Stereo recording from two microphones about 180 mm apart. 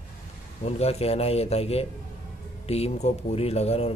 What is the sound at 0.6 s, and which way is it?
Speech, 35° left (ahead or behind).